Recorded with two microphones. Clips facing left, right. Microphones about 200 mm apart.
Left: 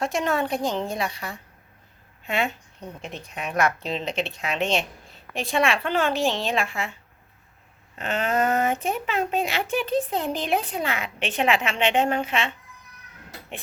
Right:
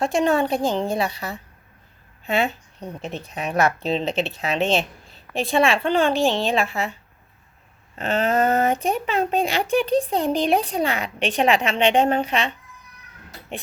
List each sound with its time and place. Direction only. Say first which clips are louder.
0.0 s a woman's voice: right 5 dB; 30° right (ahead or behind)
4.1 s a woman's voice: right 4 dB; centre (ahead or behind)
4.4 s speech: right 3 dB; 35° right (ahead or behind)
6.1 s a woman's voice: right 4 dB; centre (ahead or behind)
7.9 s speech: right 4 dB; 35° right (ahead or behind)